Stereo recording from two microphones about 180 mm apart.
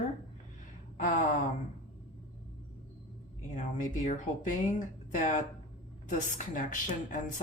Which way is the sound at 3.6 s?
45° left (ahead or behind).